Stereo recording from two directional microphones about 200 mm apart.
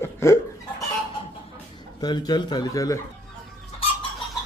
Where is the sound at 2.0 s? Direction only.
20° left (ahead or behind).